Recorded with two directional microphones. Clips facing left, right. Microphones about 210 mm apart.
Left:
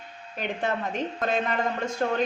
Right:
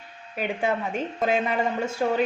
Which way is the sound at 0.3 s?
10° right (ahead or behind).